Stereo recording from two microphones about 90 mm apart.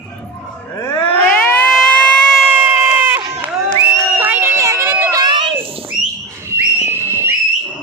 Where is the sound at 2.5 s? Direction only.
20° right (ahead or behind).